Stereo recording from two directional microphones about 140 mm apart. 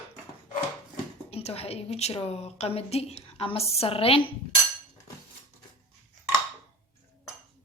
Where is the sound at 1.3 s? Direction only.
45° left (ahead or behind).